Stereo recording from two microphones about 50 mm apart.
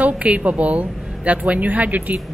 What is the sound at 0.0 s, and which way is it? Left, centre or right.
A woman's voice, right.